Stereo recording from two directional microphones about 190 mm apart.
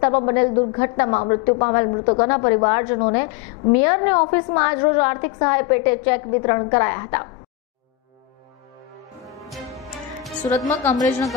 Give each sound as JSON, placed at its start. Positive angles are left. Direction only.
{"t": 0.1, "sound": "a woman's voice", "side_deg": 30}
{"t": 9.2, "sound": "music", "side_deg": 0}
{"t": 10.5, "sound": "a woman's voice", "side_deg": 10}